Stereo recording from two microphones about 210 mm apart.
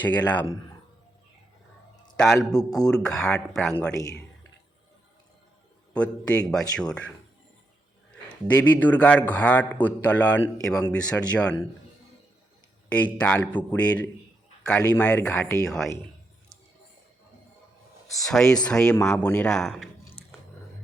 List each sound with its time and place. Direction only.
0.3 s a man's voice: 10° left (ahead or behind)
2.1 s a man's voice: 5° left (ahead or behind)
2.5 s a man's voice: 15° left (ahead or behind)
2.9 s speech: 5° left (ahead or behind)
5.9 s speech: 5° left (ahead or behind)
8.5 s a man's voice: 10° left (ahead or behind)
12.9 s a man's voice: 5° left (ahead or behind)
18.3 s speech: centre (ahead or behind)